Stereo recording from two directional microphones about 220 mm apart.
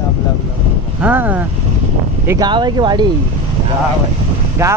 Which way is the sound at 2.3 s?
20° right (ahead or behind).